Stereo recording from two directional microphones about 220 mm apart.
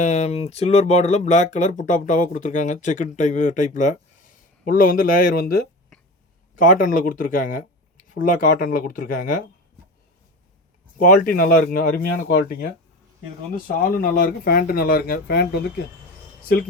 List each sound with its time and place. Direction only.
0.0 s speech: 30° left (ahead or behind)
11.0 s speech: 40° left (ahead or behind)